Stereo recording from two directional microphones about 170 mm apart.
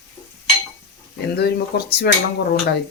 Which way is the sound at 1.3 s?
70° left (ahead or behind).